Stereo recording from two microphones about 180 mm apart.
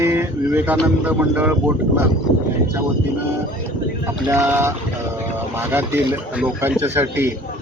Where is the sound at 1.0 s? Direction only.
10° right (ahead or behind).